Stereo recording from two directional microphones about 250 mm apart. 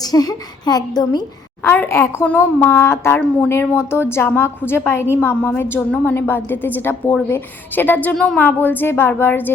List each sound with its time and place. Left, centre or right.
0.0 s a woman's voice: centre